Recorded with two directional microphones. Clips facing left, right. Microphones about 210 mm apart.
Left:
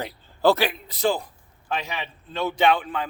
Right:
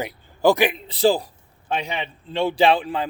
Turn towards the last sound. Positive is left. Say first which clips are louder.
# right 3 dB
turn(degrees=-30)  # may be behind; listen again after turning